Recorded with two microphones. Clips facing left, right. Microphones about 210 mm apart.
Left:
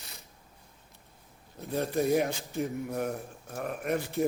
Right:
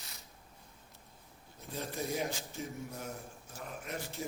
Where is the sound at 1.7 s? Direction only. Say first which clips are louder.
Left 10 dB; 65° left (ahead or behind).